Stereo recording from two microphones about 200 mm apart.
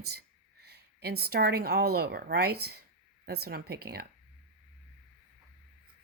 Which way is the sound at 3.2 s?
50° right (ahead or behind).